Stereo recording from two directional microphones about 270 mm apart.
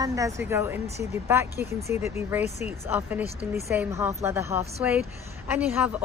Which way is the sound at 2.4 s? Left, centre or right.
Left.